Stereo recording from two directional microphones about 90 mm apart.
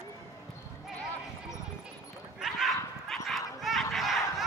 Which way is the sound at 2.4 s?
5° right (ahead or behind).